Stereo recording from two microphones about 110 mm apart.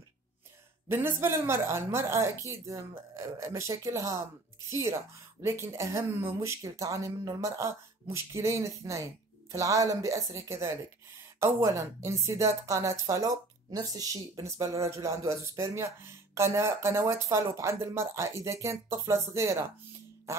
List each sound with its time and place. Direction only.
0.8 s a woman's voice: 20° right (ahead or behind)
20.3 s music: 25° right (ahead or behind)